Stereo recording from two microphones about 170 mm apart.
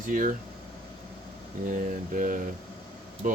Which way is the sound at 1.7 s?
50° right (ahead or behind).